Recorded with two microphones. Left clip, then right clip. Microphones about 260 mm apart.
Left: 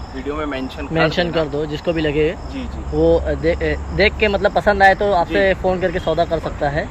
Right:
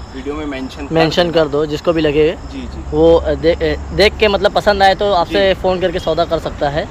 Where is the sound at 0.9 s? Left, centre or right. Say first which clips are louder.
Right 5 dB; centre.